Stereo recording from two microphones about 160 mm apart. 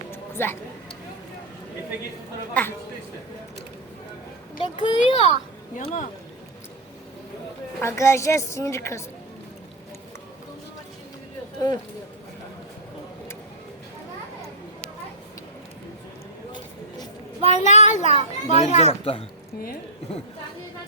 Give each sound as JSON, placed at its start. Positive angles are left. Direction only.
{"t": 0.1, "sound": "a sound", "side_deg": 15}
{"t": 4.5, "sound": "a child's voice", "side_deg": 35}
{"t": 5.7, "sound": "a child's voice", "side_deg": 55}
{"t": 7.8, "sound": "a woman's voice", "side_deg": 15}
{"t": 11.6, "sound": "speech", "side_deg": 30}
{"t": 17.5, "sound": "a child's voice", "side_deg": 45}